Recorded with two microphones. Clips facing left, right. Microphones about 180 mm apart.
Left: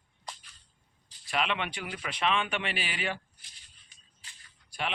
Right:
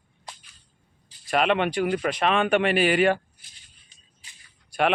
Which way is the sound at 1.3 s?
50° right (ahead or behind).